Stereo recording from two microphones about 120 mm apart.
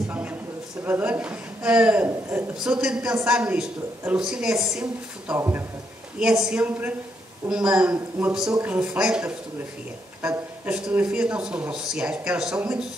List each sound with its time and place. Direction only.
0.1 s a sound: 15° right (ahead or behind)
0.8 s speech: 15° right (ahead or behind)
5.3 s speech: 20° right (ahead or behind)
6.1 s speech: 5° right (ahead or behind)